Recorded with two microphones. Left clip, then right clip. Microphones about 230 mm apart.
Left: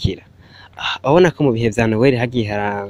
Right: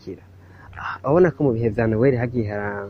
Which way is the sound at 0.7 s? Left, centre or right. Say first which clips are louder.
Left 5 dB; left.